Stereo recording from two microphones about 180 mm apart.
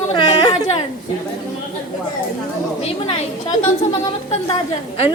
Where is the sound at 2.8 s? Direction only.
35° left (ahead or behind).